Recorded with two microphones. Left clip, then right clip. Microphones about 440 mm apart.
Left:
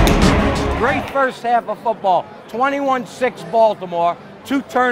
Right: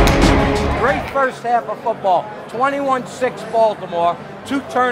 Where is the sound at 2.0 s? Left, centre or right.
Left.